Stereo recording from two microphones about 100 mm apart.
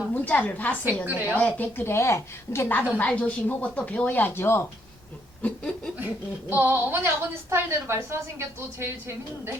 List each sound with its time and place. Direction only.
0.1 s speech: 15° left (ahead or behind)
1.0 s a woman's voice: 15° right (ahead or behind)
1.4 s a woman's voice: 15° left (ahead or behind)
5.4 s chuckle: 10° left (ahead or behind)
6.5 s a woman's voice: 20° right (ahead or behind)